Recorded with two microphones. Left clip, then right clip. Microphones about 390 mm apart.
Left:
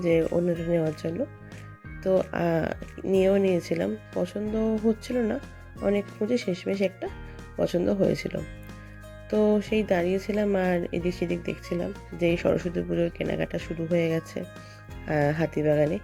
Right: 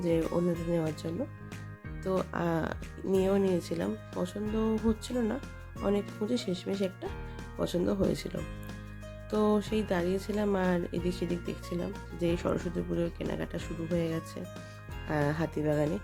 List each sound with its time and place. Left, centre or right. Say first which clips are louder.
0.0 s speech: left 6 dB; centre